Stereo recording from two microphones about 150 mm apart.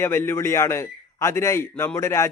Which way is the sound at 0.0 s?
15° left (ahead or behind).